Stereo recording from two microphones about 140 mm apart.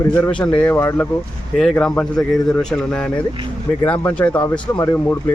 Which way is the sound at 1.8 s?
5° left (ahead or behind).